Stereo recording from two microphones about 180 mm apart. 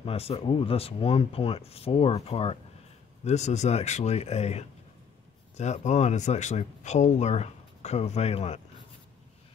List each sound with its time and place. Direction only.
0.0 s speech: 35° left (ahead or behind)